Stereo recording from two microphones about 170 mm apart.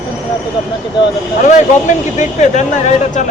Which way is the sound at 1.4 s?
45° left (ahead or behind).